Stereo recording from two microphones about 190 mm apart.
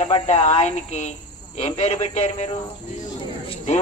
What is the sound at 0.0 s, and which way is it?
Speech, 35° left (ahead or behind).